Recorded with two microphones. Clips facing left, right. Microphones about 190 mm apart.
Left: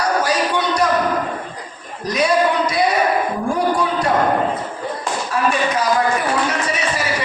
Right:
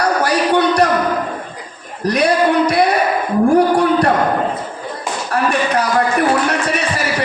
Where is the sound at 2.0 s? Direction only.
65° right (ahead or behind).